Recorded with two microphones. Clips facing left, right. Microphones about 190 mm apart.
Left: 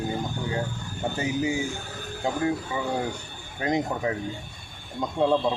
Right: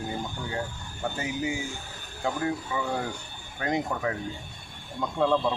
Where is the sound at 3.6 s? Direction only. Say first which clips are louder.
Left 2 dB; 20° left (ahead or behind).